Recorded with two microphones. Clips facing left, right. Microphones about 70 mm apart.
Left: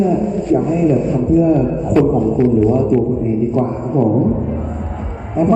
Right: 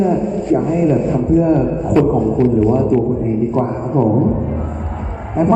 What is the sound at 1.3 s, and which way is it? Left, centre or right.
Speech, right.